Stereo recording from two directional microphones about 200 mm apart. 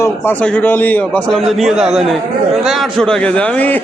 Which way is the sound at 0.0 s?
10° left (ahead or behind).